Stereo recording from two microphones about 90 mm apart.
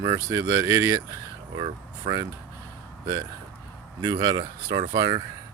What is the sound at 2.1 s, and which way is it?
Speech, 90° right.